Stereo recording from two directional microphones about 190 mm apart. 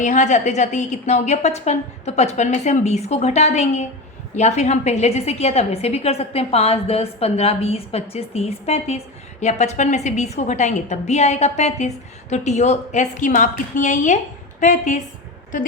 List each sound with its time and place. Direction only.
0.0 s a woman's voice: 40° left (ahead or behind)